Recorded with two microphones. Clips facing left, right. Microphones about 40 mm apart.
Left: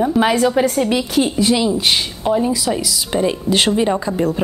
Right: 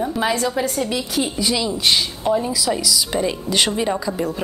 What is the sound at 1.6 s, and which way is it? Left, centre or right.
Speech, centre.